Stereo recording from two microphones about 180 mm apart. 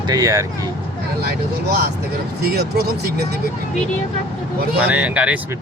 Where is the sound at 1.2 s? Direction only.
65° right (ahead or behind).